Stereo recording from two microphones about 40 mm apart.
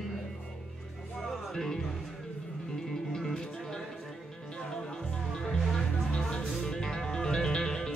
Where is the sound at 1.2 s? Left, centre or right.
Centre.